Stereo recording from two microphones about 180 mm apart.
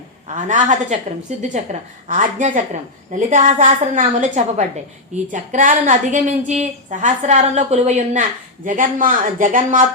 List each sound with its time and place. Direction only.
0.3 s a woman's voice: 45° right (ahead or behind)